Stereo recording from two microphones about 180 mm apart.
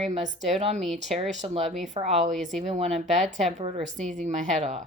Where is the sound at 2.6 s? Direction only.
35° right (ahead or behind).